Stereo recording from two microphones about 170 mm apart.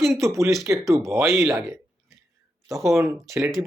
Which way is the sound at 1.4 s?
20° right (ahead or behind).